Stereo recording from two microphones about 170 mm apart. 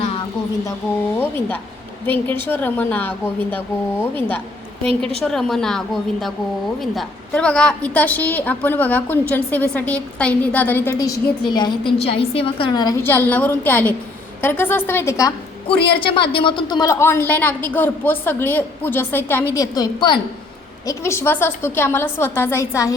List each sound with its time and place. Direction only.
1.1 s a woman's voice: 10° left (ahead or behind)
4.8 s a woman's voice: 5° left (ahead or behind)
16.0 s a woman's voice: 30° left (ahead or behind); by 19.5 s 10° left (ahead or behind)
19.5 s a woman's voice: 25° left (ahead or behind)